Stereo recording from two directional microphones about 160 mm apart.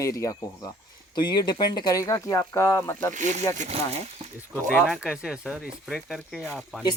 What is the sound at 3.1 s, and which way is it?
Speech, 50° right (ahead or behind).